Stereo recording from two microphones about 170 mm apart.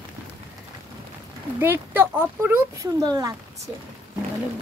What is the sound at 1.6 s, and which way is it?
Speech, 15° right (ahead or behind).